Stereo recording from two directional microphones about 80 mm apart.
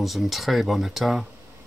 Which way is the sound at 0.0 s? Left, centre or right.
Centre.